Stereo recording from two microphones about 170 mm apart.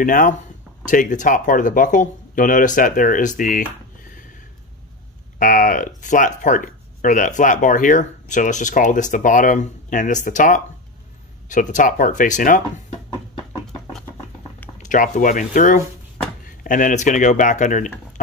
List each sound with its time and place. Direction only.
0.0 s speech: 55° left (ahead or behind)
5.4 s speech: 55° left (ahead or behind)
14.8 s speech: 50° left (ahead or behind)